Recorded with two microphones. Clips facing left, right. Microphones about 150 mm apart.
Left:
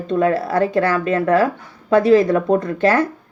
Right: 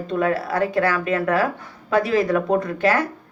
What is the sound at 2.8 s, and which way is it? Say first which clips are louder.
Speech: left 4 dB; 25° left (ahead or behind).